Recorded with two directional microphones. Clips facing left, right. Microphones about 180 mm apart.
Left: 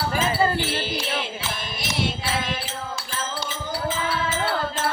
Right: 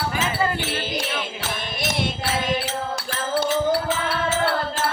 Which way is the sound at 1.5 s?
65° right (ahead or behind).